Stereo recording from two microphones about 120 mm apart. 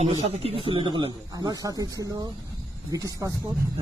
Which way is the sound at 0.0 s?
60° right (ahead or behind).